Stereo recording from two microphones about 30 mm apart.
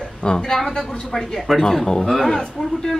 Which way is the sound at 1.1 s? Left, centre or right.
Centre.